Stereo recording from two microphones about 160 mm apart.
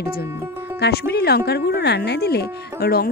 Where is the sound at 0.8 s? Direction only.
90° left.